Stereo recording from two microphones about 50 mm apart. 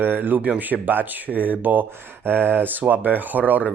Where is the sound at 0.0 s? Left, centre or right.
Right.